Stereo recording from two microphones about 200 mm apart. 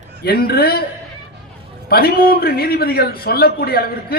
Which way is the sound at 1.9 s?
50° left (ahead or behind).